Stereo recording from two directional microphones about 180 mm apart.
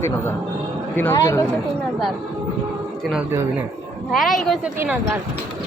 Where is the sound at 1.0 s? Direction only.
15° left (ahead or behind).